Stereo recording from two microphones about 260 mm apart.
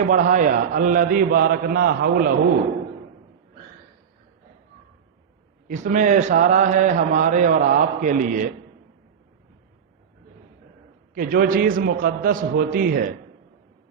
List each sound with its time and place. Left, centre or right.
0.1 s a man's voice: right
5.6 s a man's voice: right
11.1 s a man's voice: right